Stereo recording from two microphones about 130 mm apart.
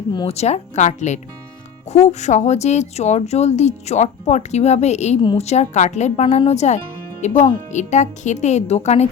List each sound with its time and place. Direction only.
0.3 s speech: 55° left (ahead or behind)